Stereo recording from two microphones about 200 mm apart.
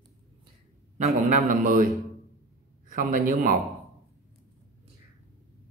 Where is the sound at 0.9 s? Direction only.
35° right (ahead or behind).